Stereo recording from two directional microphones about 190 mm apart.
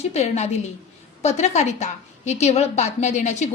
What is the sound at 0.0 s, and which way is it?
A woman's voice, 35° left (ahead or behind).